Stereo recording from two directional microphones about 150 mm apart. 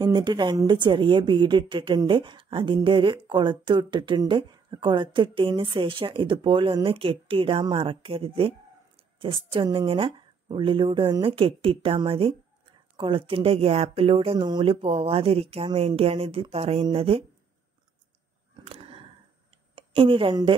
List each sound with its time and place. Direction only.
0.0 s a woman's voice: 30° right (ahead or behind)
18.7 s a sound: 40° right (ahead or behind)
19.7 s a woman's voice: 35° right (ahead or behind)